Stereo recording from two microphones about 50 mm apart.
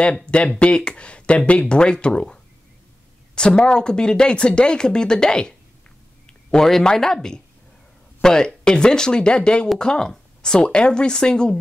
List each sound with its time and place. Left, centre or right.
0.3 s speech: left